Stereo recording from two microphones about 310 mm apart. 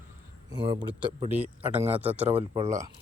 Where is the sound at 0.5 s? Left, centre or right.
Centre.